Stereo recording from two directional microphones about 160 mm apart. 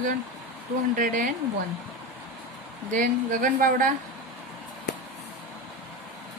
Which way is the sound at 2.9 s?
55° right (ahead or behind).